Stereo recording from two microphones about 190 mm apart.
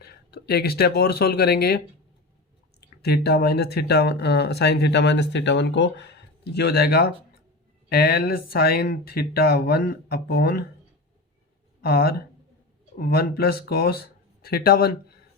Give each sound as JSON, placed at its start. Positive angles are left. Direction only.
{"t": 0.0, "sound": "speech", "side_deg": 55}
{"t": 3.0, "sound": "speech", "side_deg": 55}
{"t": 11.8, "sound": "speech", "side_deg": 55}